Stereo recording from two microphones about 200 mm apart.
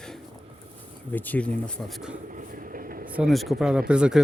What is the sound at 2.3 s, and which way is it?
Air conditioning, 40° right (ahead or behind).